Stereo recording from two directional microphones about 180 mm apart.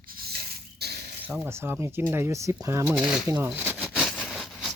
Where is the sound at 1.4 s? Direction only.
15° right (ahead or behind).